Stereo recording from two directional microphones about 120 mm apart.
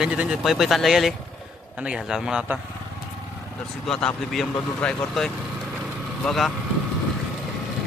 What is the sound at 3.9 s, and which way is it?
Speech, 5° left (ahead or behind).